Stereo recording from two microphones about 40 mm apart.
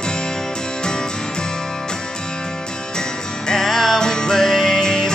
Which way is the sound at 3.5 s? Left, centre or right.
Centre.